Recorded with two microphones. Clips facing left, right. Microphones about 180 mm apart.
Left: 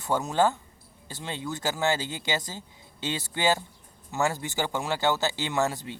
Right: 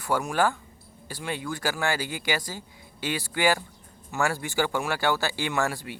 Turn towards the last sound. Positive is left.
turn(degrees=20)  # may be behind; listen again after turning